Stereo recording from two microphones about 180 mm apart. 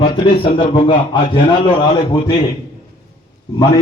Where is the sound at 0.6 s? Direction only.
30° left (ahead or behind).